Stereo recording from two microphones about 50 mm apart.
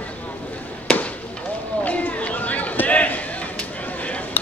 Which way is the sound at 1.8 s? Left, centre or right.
Left.